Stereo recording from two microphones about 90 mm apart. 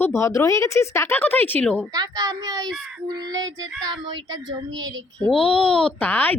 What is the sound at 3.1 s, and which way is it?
A child's voice, 50° right (ahead or behind).